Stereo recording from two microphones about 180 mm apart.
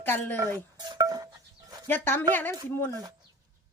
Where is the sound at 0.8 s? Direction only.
20° right (ahead or behind).